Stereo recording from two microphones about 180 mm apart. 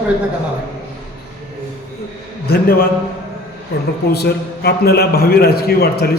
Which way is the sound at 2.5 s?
60° left (ahead or behind).